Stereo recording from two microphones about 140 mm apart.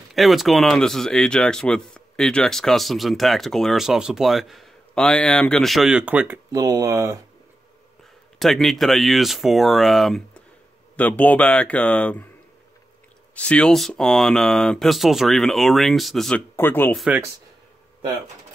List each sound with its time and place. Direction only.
0.1 s speech: centre (ahead or behind)
6.5 s speech: 25° right (ahead or behind)
8.4 s speech: centre (ahead or behind)
13.3 s speech: 10° left (ahead or behind)
16.5 s speech: 15° left (ahead or behind)
16.9 s speech: centre (ahead or behind)